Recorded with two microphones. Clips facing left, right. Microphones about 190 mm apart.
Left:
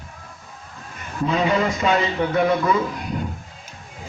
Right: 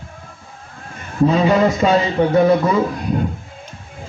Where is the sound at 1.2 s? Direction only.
35° right (ahead or behind).